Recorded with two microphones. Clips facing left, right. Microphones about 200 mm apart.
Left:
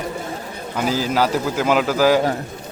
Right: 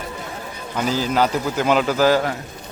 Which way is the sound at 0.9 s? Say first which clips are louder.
Even; 5° left (ahead or behind).